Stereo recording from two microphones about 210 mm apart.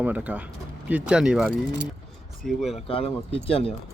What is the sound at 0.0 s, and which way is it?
Speech, 5° right (ahead or behind).